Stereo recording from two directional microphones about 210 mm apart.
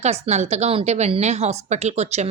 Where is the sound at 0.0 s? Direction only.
30° right (ahead or behind).